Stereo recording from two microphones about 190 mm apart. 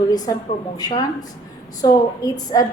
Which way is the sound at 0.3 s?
20° left (ahead or behind).